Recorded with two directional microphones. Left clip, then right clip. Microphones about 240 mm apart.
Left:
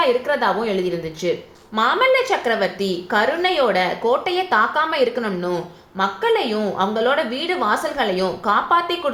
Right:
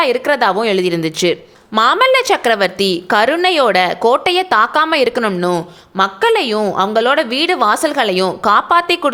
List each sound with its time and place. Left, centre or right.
0.0 s a woman's voice: right